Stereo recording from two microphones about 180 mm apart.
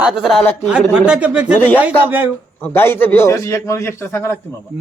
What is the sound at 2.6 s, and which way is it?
Speech, 10° left (ahead or behind).